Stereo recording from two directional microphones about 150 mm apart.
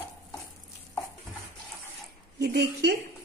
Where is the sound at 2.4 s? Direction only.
90° right.